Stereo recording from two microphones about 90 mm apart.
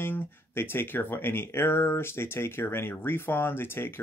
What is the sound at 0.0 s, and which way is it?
Speech, 25° left (ahead or behind).